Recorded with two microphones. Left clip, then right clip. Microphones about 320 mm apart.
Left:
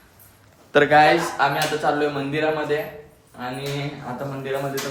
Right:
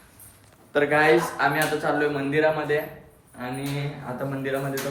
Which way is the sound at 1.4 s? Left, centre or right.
Centre.